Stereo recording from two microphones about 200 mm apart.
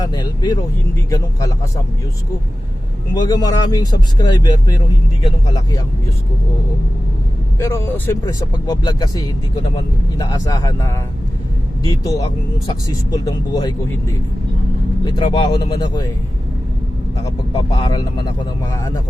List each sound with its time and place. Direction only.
0.0 s speech: 20° left (ahead or behind)
3.2 s speech: 20° left (ahead or behind)
7.6 s speech: 15° left (ahead or behind)
17.2 s speech: 20° left (ahead or behind)